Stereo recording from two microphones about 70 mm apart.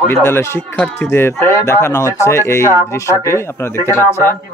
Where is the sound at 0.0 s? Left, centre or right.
Left.